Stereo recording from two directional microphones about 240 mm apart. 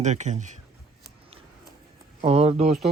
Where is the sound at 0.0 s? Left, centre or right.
Right.